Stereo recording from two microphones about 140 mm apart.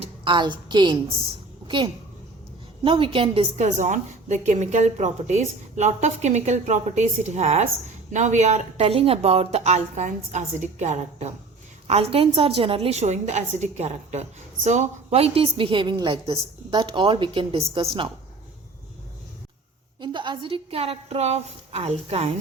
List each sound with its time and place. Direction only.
0.3 s a woman's voice: 35° right (ahead or behind)
1.6 s a sound: 35° right (ahead or behind)
2.8 s a woman's voice: 40° right (ahead or behind)
20.0 s speech: 35° right (ahead or behind)